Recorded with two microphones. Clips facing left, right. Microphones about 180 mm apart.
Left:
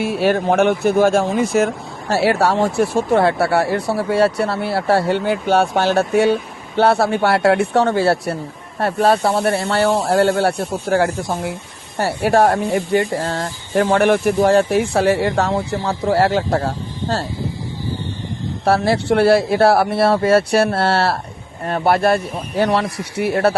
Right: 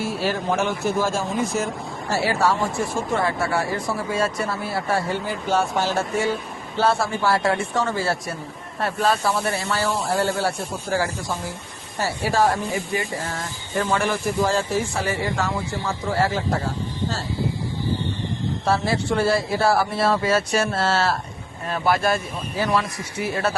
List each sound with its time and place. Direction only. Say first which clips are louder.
0.0 s speech: left 7 dB; 60° left (ahead or behind)
18.6 s speech: left 7 dB; 70° left (ahead or behind)